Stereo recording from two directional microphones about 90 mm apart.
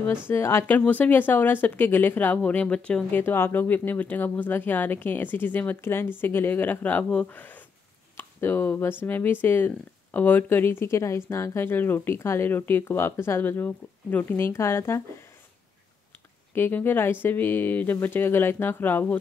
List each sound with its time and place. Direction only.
0.3 s speech: 30° left (ahead or behind); by 3.1 s 10° left (ahead or behind)
3.1 s speech: 25° left (ahead or behind)
16.5 s speech: 25° left (ahead or behind)